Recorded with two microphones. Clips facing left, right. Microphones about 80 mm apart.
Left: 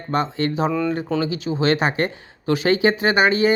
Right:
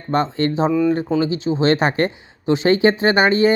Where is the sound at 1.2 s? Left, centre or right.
Right.